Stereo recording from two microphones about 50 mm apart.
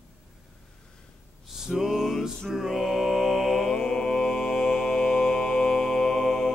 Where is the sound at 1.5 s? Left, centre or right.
Centre.